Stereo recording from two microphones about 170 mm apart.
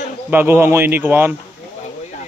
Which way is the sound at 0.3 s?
10° right (ahead or behind).